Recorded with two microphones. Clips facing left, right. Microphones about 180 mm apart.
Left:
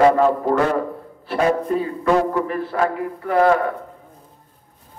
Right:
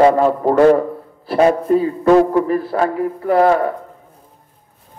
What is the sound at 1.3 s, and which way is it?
A man's voice, 35° right (ahead or behind).